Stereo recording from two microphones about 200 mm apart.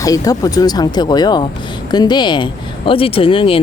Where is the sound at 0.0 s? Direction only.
15° left (ahead or behind).